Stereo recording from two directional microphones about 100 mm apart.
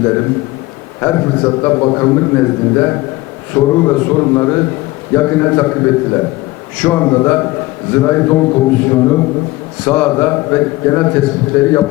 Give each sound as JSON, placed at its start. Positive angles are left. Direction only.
{"t": 0.0, "sound": "a man's voice", "side_deg": 20}